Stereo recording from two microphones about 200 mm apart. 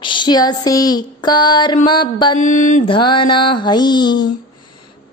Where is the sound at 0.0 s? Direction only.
25° left (ahead or behind).